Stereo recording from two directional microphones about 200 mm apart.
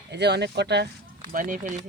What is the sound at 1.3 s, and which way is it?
Speech, 45° right (ahead or behind).